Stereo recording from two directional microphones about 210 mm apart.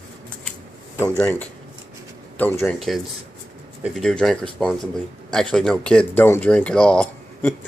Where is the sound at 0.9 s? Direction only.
10° left (ahead or behind).